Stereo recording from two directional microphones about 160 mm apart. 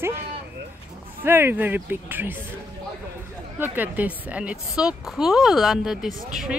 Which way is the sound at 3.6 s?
10° right (ahead or behind).